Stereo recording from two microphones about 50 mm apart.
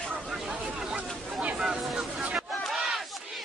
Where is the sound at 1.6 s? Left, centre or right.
Centre.